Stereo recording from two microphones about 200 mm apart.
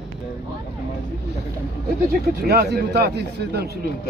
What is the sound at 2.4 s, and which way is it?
Speech, 50° right (ahead or behind).